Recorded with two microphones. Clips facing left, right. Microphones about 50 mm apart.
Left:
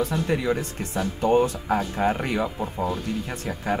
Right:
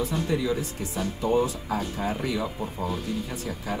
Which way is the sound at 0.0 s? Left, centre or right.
Left.